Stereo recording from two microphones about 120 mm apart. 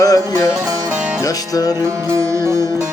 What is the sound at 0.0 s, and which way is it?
Music, 30° left (ahead or behind).